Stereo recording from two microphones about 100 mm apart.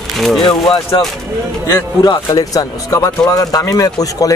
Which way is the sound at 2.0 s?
40° left (ahead or behind).